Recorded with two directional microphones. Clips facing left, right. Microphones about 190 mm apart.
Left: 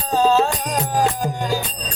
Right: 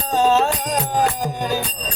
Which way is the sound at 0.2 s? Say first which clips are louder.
Even; 25° right (ahead or behind).